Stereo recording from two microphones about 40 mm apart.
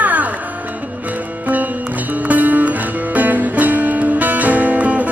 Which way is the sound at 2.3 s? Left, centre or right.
Right.